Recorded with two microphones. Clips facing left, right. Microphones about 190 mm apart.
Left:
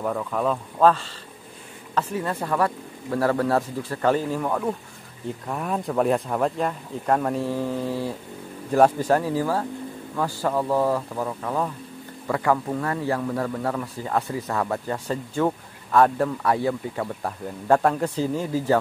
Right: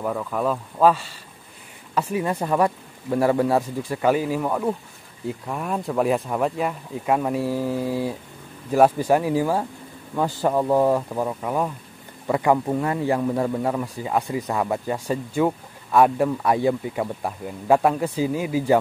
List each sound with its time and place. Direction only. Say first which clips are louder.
0.0 s speech: even; 5° right (ahead or behind)